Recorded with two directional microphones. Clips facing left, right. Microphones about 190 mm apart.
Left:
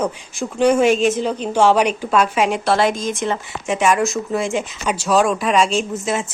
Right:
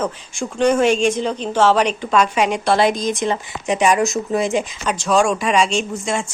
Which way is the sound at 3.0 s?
15° right (ahead or behind).